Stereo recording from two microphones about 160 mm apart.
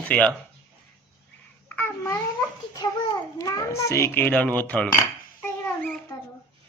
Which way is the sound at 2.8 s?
25° left (ahead or behind).